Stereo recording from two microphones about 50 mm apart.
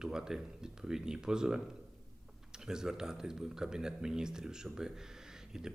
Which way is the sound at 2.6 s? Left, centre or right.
Centre.